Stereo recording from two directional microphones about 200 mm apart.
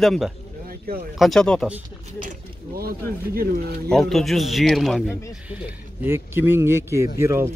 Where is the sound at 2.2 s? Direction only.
50° right (ahead or behind).